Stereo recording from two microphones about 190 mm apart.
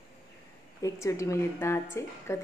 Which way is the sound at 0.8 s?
15° left (ahead or behind).